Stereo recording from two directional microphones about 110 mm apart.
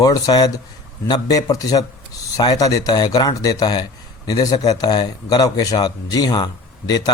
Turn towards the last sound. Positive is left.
turn(degrees=40)  # may be behind; listen again after turning